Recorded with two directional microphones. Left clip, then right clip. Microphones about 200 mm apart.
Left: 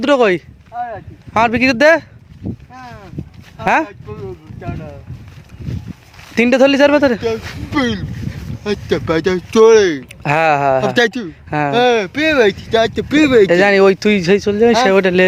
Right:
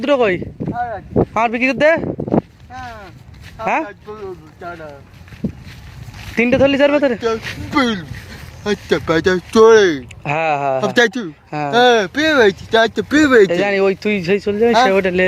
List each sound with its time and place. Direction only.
0.0 s speech: 30° left (ahead or behind)
0.7 s speech: 5° left (ahead or behind)
1.3 s speech: 35° left (ahead or behind)
3.6 s speech: 30° left (ahead or behind)
4.6 s speech: centre (ahead or behind)
6.3 s speech: 25° left (ahead or behind)
7.7 s speech: 5° left (ahead or behind)
10.2 s speech: 35° left (ahead or behind)
10.8 s speech: 15° left (ahead or behind)
11.7 s speech: centre (ahead or behind); by 13.5 s 15° left (ahead or behind)
13.5 s speech: 40° left (ahead or behind)